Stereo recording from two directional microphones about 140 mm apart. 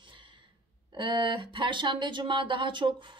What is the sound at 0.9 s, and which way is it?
Speech, 35° right (ahead or behind).